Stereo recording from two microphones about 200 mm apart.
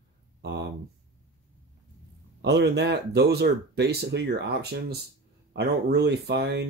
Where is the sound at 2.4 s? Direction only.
60° right (ahead or behind).